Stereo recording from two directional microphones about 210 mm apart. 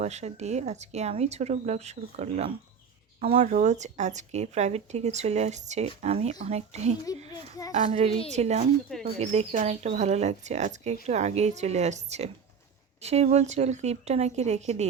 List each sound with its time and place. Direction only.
0.0 s speech: 30° right (ahead or behind)
7.0 s a child's voice: 15° left (ahead or behind)
7.7 s speech: 35° right (ahead or behind)